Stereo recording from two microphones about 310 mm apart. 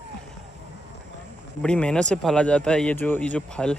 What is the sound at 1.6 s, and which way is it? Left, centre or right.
Speech, centre.